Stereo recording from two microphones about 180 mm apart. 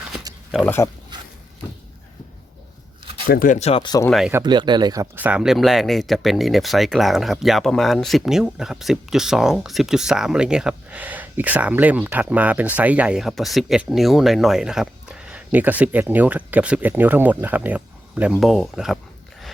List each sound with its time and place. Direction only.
0.3 s a sound: 20° right (ahead or behind)
0.6 s speech: 10° left (ahead or behind)
1.1 s a sound: 25° right (ahead or behind)
3.2 s speech: 50° left (ahead or behind); by 3.9 s 30° left (ahead or behind)
4.4 s speech: 25° right (ahead or behind)
5.1 s speech: 10° right (ahead or behind)